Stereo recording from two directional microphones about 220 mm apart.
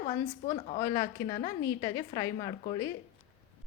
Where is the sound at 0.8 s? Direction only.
15° left (ahead or behind).